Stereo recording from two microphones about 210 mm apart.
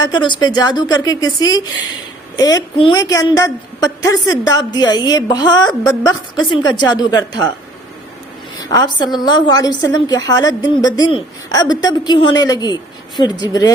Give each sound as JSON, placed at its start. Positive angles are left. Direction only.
{"t": 0.0, "sound": "a woman's voice", "side_deg": 20}
{"t": 8.7, "sound": "a woman's voice", "side_deg": 20}